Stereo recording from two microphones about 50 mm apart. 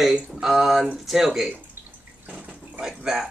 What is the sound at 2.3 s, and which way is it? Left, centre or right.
Water, right.